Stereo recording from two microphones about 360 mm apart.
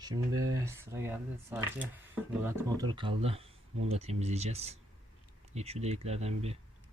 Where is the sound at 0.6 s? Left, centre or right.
Centre.